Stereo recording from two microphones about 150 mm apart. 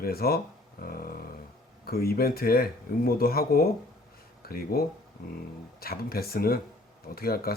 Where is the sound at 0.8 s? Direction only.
80° left.